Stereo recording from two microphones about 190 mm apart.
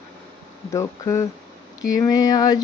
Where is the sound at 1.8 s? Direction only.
20° left (ahead or behind).